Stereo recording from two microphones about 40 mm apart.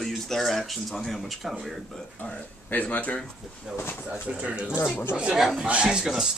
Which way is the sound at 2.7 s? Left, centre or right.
Left.